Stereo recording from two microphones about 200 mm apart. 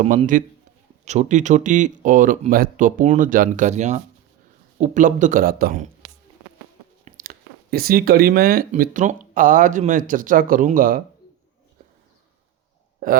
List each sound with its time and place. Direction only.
0.0 s speech: 35° right (ahead or behind)
7.0 s speech: 45° right (ahead or behind)